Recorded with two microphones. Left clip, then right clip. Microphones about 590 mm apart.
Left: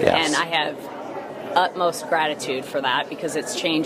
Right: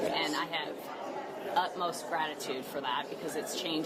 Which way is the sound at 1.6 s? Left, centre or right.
Left.